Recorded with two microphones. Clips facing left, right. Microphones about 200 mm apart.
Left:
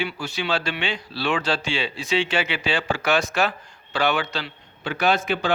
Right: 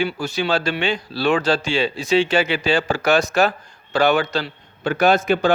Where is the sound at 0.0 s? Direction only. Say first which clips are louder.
Right 6 dB; 45° right (ahead or behind).